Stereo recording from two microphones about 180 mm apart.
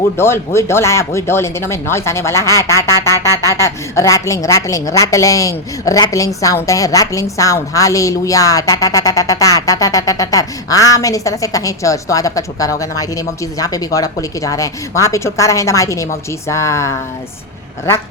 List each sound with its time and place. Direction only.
0.2 s a woman's voice: 15° left (ahead or behind)